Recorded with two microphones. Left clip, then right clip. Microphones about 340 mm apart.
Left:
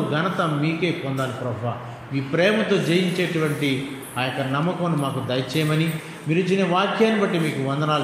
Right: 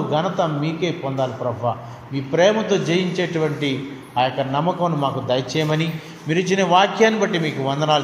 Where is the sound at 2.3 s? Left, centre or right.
Centre.